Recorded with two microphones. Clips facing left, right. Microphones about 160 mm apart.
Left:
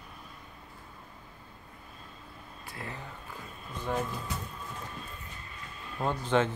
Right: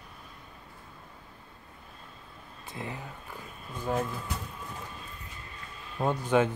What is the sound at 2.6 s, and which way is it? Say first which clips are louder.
Speech: right 3 dB; 20° right (ahead or behind).